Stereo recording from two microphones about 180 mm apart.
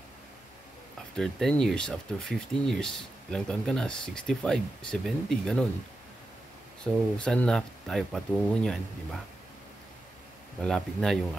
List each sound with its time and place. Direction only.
1.1 s speech: centre (ahead or behind)
6.8 s speech: 5° left (ahead or behind)
10.6 s speech: centre (ahead or behind)